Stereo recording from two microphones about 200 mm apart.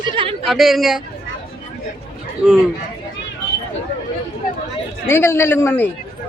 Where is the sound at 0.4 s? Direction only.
Centre (ahead or behind).